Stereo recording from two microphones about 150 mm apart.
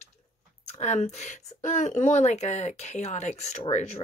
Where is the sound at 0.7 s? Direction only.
50° left (ahead or behind).